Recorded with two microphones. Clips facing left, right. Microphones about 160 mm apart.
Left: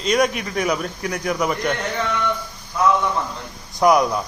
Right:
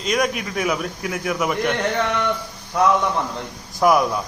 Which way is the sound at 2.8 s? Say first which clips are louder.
Right 1 dB; 75° right (ahead or behind).